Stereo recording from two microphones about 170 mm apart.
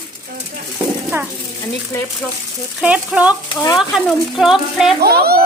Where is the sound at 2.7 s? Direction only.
5° right (ahead or behind).